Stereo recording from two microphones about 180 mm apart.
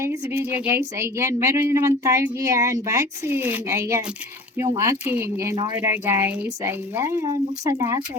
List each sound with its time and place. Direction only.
0.0 s speech: 15° right (ahead or behind)